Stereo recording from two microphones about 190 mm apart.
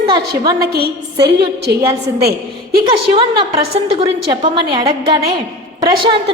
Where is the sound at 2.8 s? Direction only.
25° right (ahead or behind).